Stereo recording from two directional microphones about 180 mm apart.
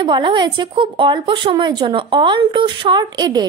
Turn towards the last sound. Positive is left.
turn(degrees=-20)  # may be behind; listen again after turning